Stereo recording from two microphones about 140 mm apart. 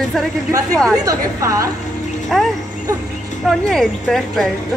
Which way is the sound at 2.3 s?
Centre (ahead or behind).